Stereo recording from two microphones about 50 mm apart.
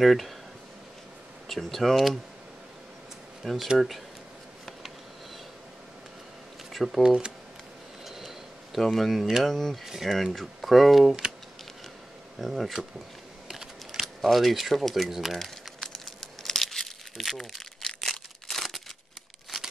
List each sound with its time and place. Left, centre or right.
0.0 s speech: centre
1.5 s speech: centre
3.4 s speech: centre
6.7 s shuffling cards: centre
7.0 s speech: centre
8.0 s a sound: centre
9.4 s speech: centre
9.8 s speech: centre
12.4 s speech: centre
13.5 s a sound: centre
14.0 s speech: centre
15.3 s crumpling: centre